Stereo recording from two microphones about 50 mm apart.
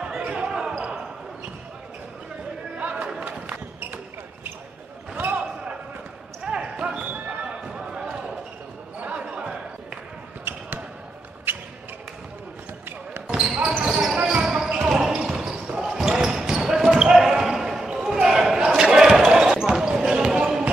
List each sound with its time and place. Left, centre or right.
0.2 s basketball bounce: right
2.8 s a sound: right
3.1 s basketball bounce: right
5.3 s basketball bounce: right
7.1 s basketball bounce: right
7.4 s basketball bounce: centre
9.0 s basketball bounce: right
11.5 s a sound: right
13.5 s basketball bounce: centre
13.8 s basketball bounce: centre